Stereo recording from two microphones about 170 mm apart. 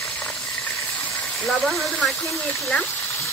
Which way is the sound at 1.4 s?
5° left (ahead or behind).